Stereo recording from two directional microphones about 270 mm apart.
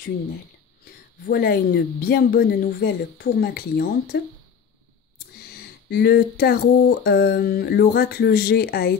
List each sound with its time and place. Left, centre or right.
1.2 s speech: left
5.5 s speech: left